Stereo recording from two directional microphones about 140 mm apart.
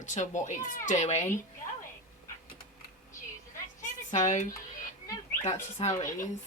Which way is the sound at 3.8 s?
60° left (ahead or behind).